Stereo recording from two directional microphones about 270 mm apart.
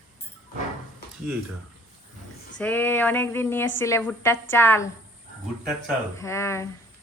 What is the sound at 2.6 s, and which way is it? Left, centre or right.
A woman's voice, centre.